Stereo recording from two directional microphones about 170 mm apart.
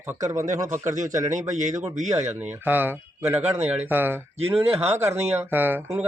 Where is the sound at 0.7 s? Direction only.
45° right (ahead or behind).